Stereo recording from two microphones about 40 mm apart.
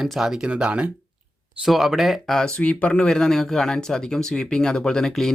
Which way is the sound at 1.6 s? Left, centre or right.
Centre.